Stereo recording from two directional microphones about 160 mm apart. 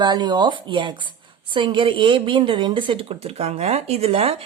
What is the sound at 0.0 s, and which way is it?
A woman's voice, 25° right (ahead or behind).